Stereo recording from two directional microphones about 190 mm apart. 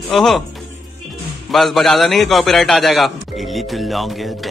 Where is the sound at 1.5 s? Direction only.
Centre (ahead or behind).